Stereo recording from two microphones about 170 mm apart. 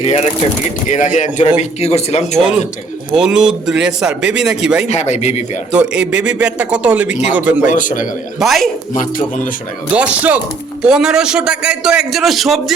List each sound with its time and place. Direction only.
0.0 s speech: 40° left (ahead or behind)
3.1 s a man's voice: 5° right (ahead or behind)
4.9 s speech: 40° left (ahead or behind)
5.7 s speech: 5° right (ahead or behind)
7.7 s speech: 50° left (ahead or behind)
8.4 s a man's voice: centre (ahead or behind)
8.9 s speech: 50° left (ahead or behind)
9.9 s a man's voice: 10° right (ahead or behind)